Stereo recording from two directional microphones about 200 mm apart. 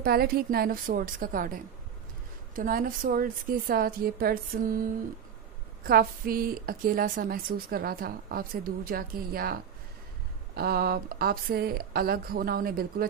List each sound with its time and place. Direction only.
0.0 s a woman's voice: 50° right (ahead or behind)
5.9 s a woman's voice: 50° right (ahead or behind)